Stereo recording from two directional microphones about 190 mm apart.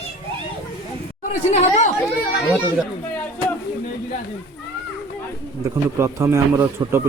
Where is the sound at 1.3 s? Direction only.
35° left (ahead or behind).